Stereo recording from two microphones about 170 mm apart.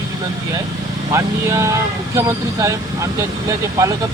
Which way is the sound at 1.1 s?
15° right (ahead or behind).